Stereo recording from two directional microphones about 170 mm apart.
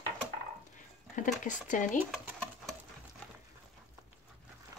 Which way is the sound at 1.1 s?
50° left (ahead or behind).